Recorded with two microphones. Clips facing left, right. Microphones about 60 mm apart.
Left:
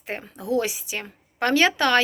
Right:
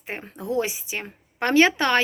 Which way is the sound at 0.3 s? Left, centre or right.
Right.